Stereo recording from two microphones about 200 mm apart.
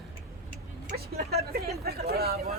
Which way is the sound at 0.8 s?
50° right (ahead or behind).